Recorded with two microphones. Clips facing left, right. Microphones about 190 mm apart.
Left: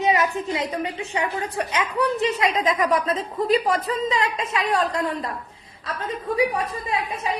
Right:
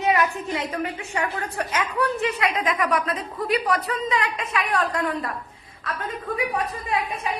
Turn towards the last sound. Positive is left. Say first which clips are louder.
# even
turn(degrees=25)  # may be behind; listen again after turning